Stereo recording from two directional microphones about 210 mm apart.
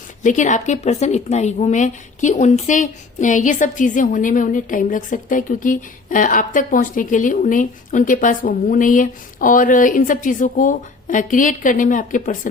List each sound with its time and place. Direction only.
0.2 s a woman's voice: 35° left (ahead or behind)